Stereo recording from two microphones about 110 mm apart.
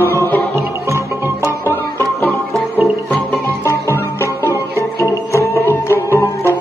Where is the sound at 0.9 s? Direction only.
25° left (ahead or behind).